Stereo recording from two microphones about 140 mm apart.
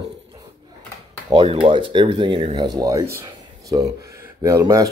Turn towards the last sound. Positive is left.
turn(degrees=-25)  # may be behind; listen again after turning